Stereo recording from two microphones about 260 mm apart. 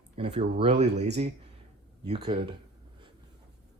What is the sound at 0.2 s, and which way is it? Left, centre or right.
Speech, right.